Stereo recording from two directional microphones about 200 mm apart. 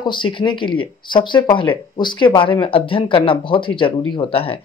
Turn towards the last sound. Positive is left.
turn(degrees=30)  # may be behind; listen again after turning